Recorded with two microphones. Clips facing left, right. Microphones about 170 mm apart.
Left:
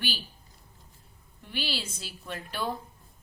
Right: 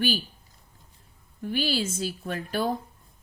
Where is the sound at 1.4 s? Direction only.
45° right (ahead or behind).